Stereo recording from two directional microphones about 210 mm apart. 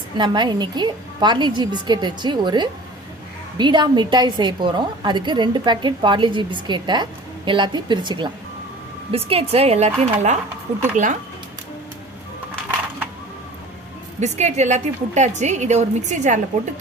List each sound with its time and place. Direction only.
0.2 s a woman's voice: 20° right (ahead or behind); by 11.2 s 35° right (ahead or behind)
14.2 s a woman's voice: 35° right (ahead or behind)